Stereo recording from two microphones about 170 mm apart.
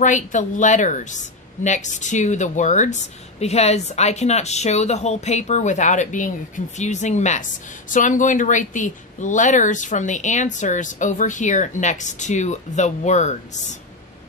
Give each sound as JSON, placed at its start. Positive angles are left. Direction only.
{"t": 0.0, "sound": "a woman's voice", "side_deg": 45}